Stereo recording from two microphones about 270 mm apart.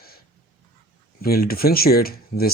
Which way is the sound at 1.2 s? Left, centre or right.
Left.